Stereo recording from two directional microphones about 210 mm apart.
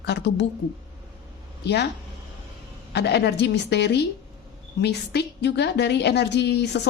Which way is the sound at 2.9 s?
50° left (ahead or behind).